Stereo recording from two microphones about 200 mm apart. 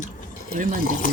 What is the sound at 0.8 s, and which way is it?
Speech, 40° left (ahead or behind).